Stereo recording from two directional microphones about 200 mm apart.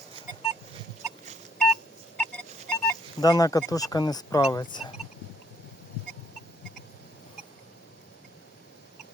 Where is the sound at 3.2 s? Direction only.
20° left (ahead or behind).